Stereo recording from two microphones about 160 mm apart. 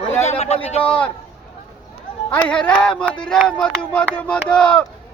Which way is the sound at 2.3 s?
10° left (ahead or behind).